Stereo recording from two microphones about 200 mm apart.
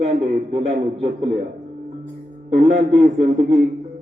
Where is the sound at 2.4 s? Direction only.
35° right (ahead or behind).